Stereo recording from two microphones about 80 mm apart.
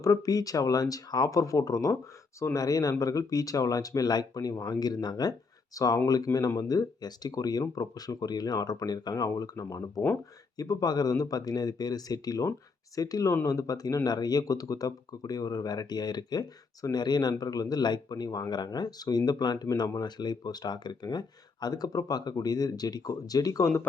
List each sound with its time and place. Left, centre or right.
0.0 s speech: left
9.3 s speech: left